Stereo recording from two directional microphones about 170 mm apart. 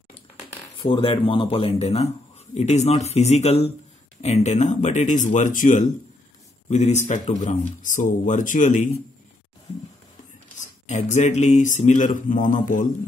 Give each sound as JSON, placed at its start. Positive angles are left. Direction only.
{"t": 0.7, "sound": "speech", "side_deg": 30}
{"t": 10.6, "sound": "speech", "side_deg": 45}